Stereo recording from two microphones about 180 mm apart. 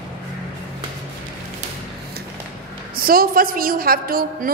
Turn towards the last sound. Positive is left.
turn(degrees=-55)  # may be behind; listen again after turning